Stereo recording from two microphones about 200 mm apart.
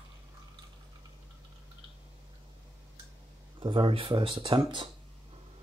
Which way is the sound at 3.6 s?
25° right (ahead or behind).